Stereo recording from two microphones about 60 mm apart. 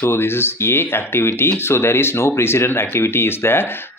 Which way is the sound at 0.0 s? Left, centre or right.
Left.